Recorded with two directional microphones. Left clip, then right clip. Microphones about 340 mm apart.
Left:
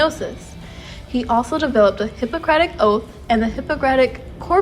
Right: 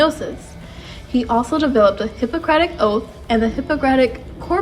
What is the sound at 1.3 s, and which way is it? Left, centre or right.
A woman's voice, left.